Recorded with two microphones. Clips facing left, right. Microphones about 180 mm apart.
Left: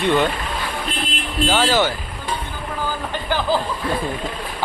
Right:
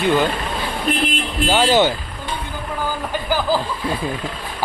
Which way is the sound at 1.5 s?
15° right (ahead or behind).